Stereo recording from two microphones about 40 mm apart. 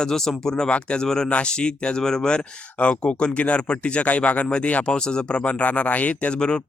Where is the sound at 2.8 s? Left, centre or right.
Left.